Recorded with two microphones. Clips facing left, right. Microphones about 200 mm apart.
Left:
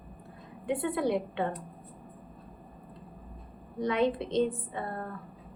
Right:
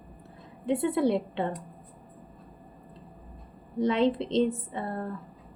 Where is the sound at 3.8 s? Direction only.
25° right (ahead or behind).